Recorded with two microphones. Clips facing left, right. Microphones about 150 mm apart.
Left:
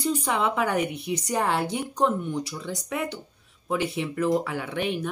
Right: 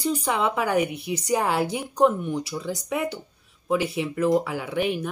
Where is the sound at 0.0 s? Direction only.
Centre (ahead or behind).